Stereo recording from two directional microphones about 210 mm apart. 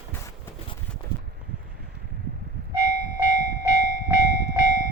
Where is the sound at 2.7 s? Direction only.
40° left (ahead or behind).